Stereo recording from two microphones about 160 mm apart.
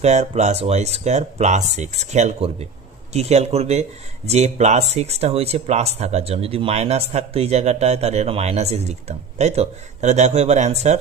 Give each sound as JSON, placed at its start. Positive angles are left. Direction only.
{"t": 0.0, "sound": "speech", "side_deg": -45}